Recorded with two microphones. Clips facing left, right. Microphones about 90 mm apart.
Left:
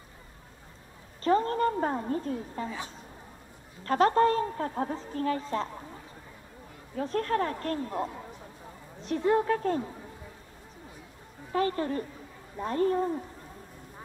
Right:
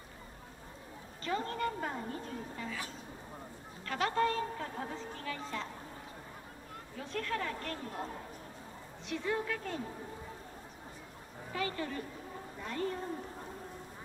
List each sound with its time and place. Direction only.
1.2 s a woman's voice: 40° left (ahead or behind)
3.8 s a woman's voice: 40° left (ahead or behind)
7.0 s a woman's voice: 40° left (ahead or behind)
11.5 s a woman's voice: 40° left (ahead or behind)